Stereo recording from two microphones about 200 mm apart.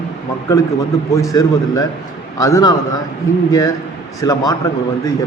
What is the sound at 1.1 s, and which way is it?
A man's voice, 15° left (ahead or behind).